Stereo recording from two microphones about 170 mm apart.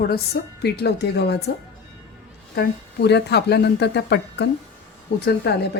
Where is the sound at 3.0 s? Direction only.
75° left (ahead or behind).